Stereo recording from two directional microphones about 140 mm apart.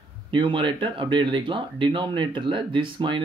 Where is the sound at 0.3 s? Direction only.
35° right (ahead or behind).